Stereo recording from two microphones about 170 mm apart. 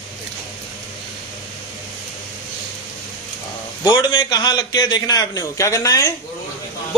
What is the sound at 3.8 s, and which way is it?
A man's voice, 20° left (ahead or behind).